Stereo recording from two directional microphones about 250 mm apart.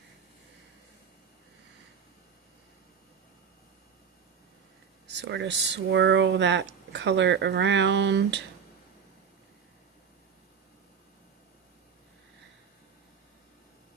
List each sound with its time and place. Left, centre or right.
5.0 s speech: right